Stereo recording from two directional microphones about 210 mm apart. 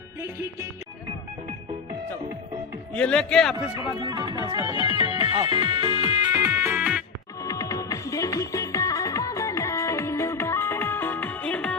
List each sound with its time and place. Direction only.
0.2 s music: 10° right (ahead or behind)
2.9 s speech: 5° left (ahead or behind)
3.8 s music: 20° right (ahead or behind)
6.4 s music: 10° right (ahead or behind)
7.4 s music: 15° left (ahead or behind)